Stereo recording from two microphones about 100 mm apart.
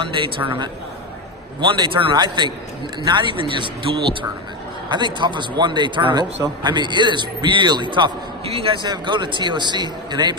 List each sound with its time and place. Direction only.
0.0 s speech: 60° right (ahead or behind)
2.1 s a man's voice: 50° right (ahead or behind)
8.4 s a man's voice: 70° right (ahead or behind)
8.8 s a man's voice: 50° right (ahead or behind)